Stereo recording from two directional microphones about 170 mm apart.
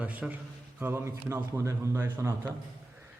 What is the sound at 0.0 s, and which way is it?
A man's voice, 10° right (ahead or behind).